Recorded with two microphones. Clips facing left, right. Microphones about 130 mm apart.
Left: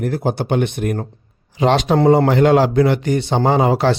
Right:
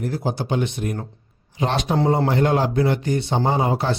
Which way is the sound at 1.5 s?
90° left.